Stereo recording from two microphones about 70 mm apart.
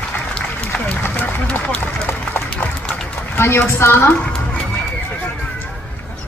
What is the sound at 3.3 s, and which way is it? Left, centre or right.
Speech, left.